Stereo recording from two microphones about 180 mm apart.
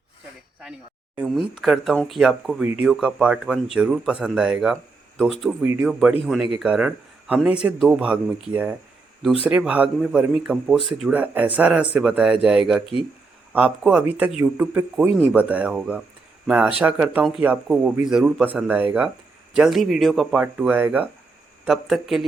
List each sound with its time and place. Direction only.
1.1 s speech: 5° right (ahead or behind)
5.6 s a man's voice: 15° right (ahead or behind)
5.9 s a man's voice: 5° right (ahead or behind)
12.8 s speech: 30° left (ahead or behind)
13.5 s a man's voice: 10° right (ahead or behind)
20.4 s a man's voice: 10° right (ahead or behind)